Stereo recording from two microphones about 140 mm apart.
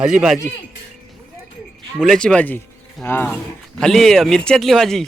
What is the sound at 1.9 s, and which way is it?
Speech, 5° left (ahead or behind).